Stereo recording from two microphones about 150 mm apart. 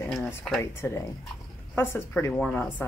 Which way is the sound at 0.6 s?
15° left (ahead or behind).